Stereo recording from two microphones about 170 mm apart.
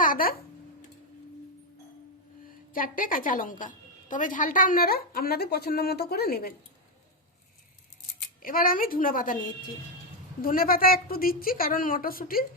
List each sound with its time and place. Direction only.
0.0 s a sound: 55° left (ahead or behind)
2.7 s a woman's voice: 55° left (ahead or behind)
8.4 s a woman's voice: 55° left (ahead or behind)
10.4 s a woman's voice: 60° left (ahead or behind)